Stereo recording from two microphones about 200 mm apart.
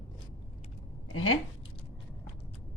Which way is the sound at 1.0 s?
90° left.